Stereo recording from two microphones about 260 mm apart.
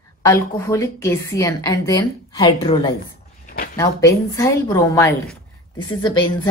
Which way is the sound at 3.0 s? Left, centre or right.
Left.